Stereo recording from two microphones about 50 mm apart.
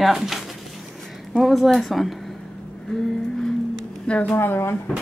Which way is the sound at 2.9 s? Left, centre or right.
Centre.